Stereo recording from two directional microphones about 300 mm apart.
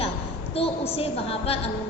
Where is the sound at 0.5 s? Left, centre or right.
Centre.